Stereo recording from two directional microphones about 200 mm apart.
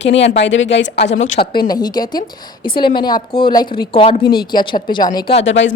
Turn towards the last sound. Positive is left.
turn(degrees=65)  # may be behind; listen again after turning